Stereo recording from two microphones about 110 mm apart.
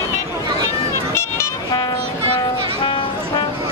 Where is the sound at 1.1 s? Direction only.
25° left (ahead or behind).